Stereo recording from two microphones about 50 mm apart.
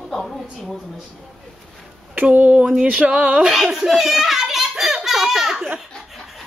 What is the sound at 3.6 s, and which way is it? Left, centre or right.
A child's voice, centre.